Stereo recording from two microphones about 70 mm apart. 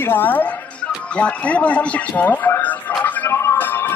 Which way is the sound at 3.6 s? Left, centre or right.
Left.